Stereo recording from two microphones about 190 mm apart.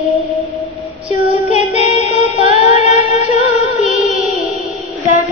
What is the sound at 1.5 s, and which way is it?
Music, 35° left (ahead or behind).